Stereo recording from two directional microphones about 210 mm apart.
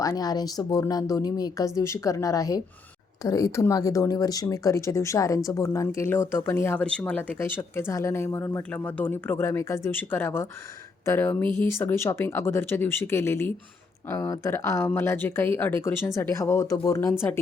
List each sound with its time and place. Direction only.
0.0 s speech: 15° left (ahead or behind)